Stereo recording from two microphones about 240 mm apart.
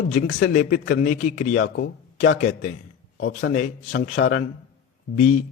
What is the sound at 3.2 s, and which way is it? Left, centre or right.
A man's voice, left.